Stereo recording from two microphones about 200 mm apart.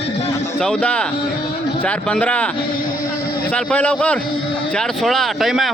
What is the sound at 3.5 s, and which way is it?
Speech, 5° left (ahead or behind).